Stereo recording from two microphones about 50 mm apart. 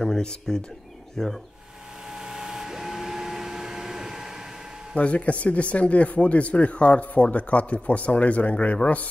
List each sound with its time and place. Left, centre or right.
0.0 s speech: centre
2.1 s vacuum cleaner: centre
4.9 s speech: left